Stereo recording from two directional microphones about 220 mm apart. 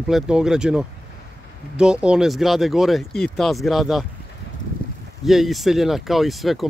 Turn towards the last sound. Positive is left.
turn(degrees=0)  # may be behind; listen again after turning